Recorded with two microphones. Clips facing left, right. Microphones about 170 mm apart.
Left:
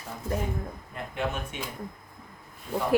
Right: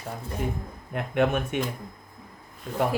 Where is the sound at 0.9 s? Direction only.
65° right (ahead or behind).